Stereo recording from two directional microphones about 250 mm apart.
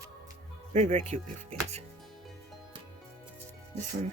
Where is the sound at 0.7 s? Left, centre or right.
Right.